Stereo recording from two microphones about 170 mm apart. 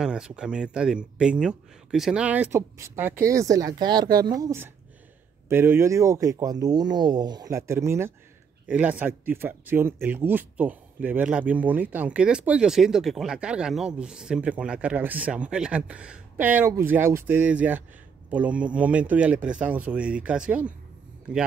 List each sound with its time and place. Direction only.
0.0 s speech: 5° right (ahead or behind)